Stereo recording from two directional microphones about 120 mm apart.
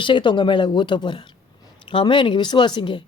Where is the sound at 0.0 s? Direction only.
45° left (ahead or behind).